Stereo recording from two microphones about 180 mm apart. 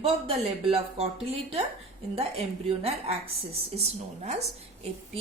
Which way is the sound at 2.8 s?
35° right (ahead or behind).